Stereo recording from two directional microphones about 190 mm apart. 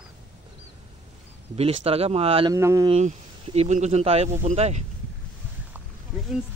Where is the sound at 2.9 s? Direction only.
35° right (ahead or behind).